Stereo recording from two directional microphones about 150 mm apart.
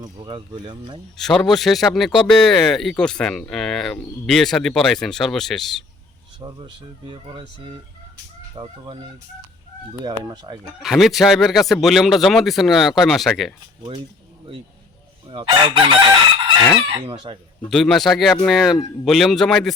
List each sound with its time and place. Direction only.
0.0 s speech: 35° right (ahead or behind)
1.2 s a man's voice: centre (ahead or behind)
6.4 s speech: 25° right (ahead or behind)
8.5 s speech: 30° right (ahead or behind)
10.0 s speech: 25° right (ahead or behind)
10.8 s a man's voice: centre (ahead or behind)
15.4 s speech: 30° right (ahead or behind)
17.7 s a man's voice: centre (ahead or behind)